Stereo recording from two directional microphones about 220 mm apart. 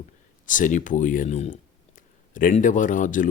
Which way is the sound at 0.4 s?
35° left (ahead or behind).